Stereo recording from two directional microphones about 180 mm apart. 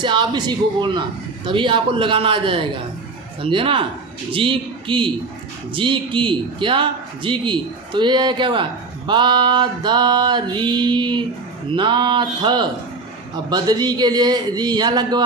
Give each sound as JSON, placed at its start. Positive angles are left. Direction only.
{"t": 0.0, "sound": "a man's voice", "side_deg": -25}